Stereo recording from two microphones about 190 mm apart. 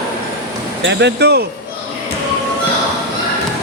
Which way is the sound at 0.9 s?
65° right (ahead or behind).